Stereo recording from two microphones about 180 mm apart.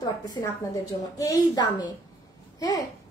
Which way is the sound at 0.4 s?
20° left (ahead or behind).